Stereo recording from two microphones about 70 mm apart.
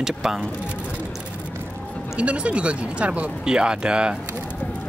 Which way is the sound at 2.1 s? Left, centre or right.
Centre.